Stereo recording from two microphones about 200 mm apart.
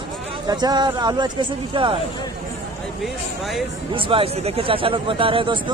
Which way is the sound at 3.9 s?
25° right (ahead or behind).